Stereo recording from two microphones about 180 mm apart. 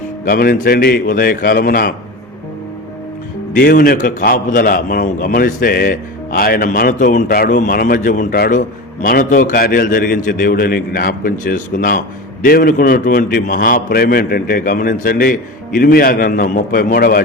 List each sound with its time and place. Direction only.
0.3 s a man's voice: 55° left (ahead or behind)
3.5 s a man's voice: 55° left (ahead or behind)